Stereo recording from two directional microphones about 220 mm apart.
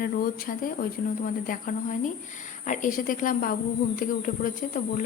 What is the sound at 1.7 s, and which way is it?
Speech, 40° left (ahead or behind).